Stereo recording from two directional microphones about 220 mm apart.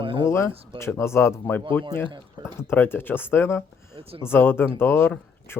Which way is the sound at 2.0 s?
20° right (ahead or behind).